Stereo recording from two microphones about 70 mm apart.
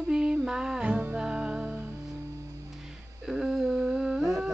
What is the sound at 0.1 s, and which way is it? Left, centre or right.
Music, centre.